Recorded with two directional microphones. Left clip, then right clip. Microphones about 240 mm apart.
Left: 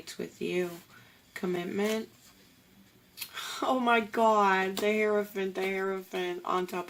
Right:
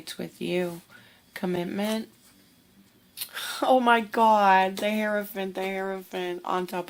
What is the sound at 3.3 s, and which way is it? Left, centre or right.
Speech, right.